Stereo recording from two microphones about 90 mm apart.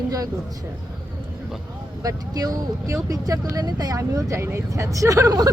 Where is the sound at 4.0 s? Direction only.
35° right (ahead or behind).